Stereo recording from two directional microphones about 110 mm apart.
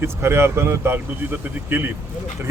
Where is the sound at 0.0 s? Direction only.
25° right (ahead or behind).